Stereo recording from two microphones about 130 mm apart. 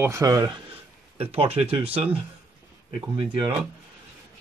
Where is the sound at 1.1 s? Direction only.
50° right (ahead or behind).